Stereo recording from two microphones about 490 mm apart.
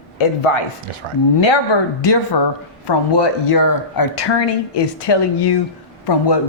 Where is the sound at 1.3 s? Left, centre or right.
Left.